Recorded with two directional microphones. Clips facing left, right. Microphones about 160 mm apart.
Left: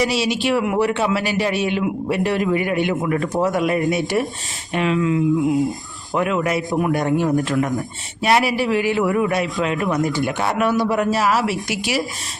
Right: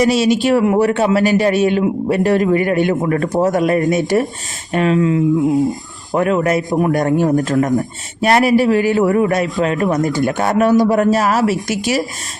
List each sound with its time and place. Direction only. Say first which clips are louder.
0.0 s a man's voice: right 6 dB; 45° right (ahead or behind)